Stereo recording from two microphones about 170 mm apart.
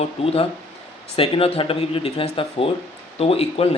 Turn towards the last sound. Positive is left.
turn(degrees=35)  # may be behind; listen again after turning